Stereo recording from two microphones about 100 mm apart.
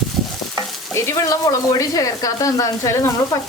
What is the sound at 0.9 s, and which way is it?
Speech, 30° left (ahead or behind).